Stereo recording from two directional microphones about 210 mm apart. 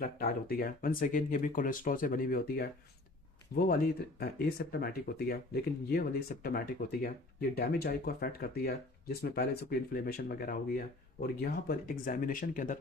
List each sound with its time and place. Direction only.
0.0 s speech: 45° left (ahead or behind)